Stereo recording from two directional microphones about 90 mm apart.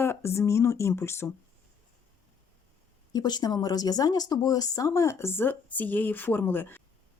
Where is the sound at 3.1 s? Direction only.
50° left (ahead or behind); by 6.8 s 20° left (ahead or behind).